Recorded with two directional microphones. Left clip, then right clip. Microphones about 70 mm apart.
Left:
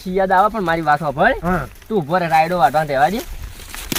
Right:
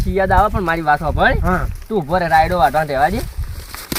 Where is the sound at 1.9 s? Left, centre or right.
Centre.